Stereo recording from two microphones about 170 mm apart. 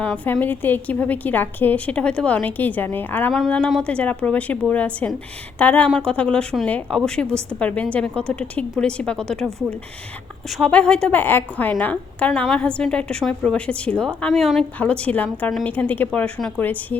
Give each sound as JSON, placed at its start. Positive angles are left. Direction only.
{"t": 0.0, "sound": "a woman's voice", "side_deg": 10}
{"t": 10.5, "sound": "a woman's voice", "side_deg": 5}